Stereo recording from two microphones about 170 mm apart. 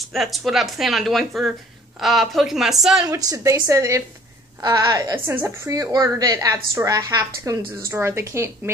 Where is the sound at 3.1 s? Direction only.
20° right (ahead or behind).